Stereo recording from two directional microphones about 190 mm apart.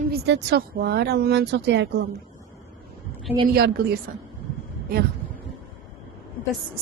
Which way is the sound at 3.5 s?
55° right (ahead or behind).